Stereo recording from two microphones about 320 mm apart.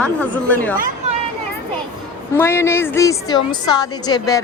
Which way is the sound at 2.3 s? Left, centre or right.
Centre.